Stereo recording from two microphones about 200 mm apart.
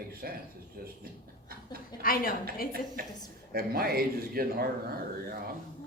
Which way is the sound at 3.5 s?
50° right (ahead or behind).